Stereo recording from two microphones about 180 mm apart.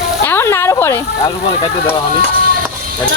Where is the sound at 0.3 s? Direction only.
15° left (ahead or behind).